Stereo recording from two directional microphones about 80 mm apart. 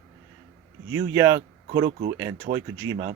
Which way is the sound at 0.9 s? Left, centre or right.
Right.